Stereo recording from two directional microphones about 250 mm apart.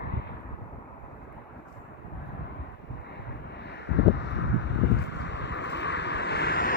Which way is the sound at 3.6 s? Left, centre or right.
Left.